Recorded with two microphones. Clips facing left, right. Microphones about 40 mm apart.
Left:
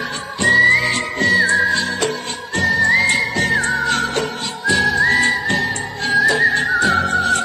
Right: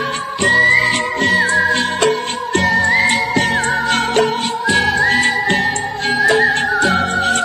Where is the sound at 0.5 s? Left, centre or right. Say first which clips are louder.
Right 1 dB; centre.